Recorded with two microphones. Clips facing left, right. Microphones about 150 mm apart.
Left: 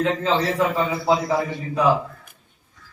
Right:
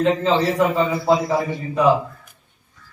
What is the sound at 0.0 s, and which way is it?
A man's voice, centre (ahead or behind).